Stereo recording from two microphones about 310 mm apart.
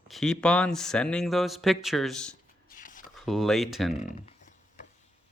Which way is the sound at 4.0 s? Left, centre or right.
Left.